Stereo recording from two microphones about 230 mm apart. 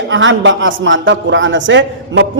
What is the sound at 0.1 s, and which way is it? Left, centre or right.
A man's voice, right.